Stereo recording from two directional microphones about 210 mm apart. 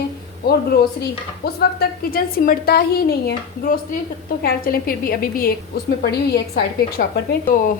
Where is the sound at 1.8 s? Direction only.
45° left (ahead or behind).